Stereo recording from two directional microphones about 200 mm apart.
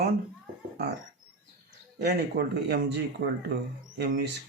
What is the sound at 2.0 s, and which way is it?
Speech, 55° right (ahead or behind).